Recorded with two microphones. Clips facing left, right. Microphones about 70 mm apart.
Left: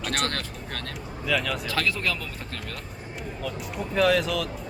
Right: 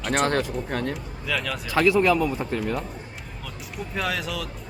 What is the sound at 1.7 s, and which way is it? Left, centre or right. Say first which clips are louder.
Speech: right 12 dB; centre.